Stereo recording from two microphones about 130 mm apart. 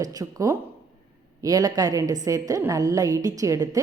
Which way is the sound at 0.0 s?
25° right (ahead or behind).